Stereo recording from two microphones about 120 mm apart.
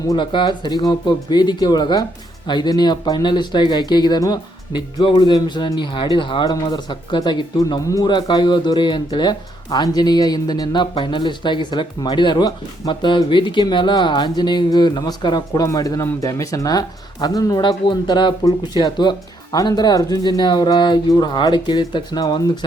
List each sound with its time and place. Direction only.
0.2 s speech: 40° left (ahead or behind)